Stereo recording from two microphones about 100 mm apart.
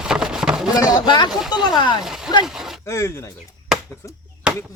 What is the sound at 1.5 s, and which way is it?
Chopping, 45° left (ahead or behind).